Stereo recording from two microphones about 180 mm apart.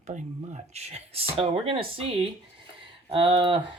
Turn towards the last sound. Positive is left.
turn(degrees=-30)  # may be behind; listen again after turning